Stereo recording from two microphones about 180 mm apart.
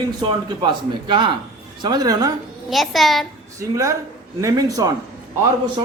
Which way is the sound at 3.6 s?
20° right (ahead or behind).